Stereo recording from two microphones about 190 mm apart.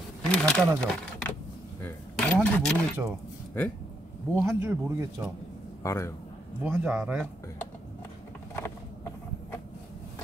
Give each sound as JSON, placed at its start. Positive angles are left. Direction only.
{"t": 0.2, "sound": "speech", "side_deg": 5}
{"t": 1.8, "sound": "a sound", "side_deg": 10}
{"t": 4.4, "sound": "speech", "side_deg": -10}
{"t": 5.8, "sound": "a man's voice", "side_deg": 15}
{"t": 6.6, "sound": "speech", "side_deg": -10}
{"t": 8.6, "sound": "a sound", "side_deg": 15}